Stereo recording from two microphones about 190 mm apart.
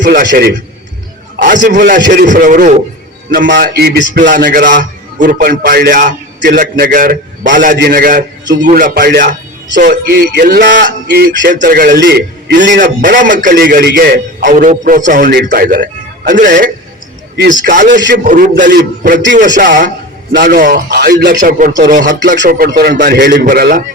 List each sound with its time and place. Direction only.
0.0 s a man's voice: 45° right (ahead or behind)
3.3 s a man's voice: 70° right (ahead or behind)
3.6 s speech: 55° right (ahead or behind)
4.6 s a man's voice: 40° right (ahead or behind)
12.0 s a man's voice: 60° right (ahead or behind)
12.7 s a man's voice: 45° right (ahead or behind)
15.3 s a man's voice: 55° right (ahead or behind)
21.4 s a man's voice: 45° right (ahead or behind)